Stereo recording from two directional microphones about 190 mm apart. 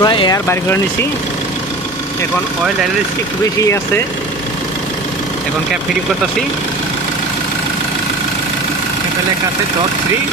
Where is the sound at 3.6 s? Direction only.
15° left (ahead or behind).